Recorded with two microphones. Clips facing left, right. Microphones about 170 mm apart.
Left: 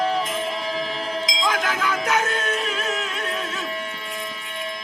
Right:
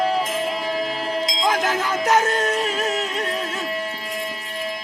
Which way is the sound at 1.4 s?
45° right (ahead or behind).